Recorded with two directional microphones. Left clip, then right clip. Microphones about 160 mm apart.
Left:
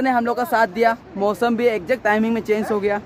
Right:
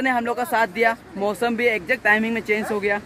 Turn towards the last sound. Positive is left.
turn(degrees=20)  # may be behind; listen again after turning